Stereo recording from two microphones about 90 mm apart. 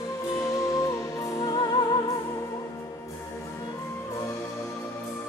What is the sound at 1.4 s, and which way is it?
Music, 50° left (ahead or behind).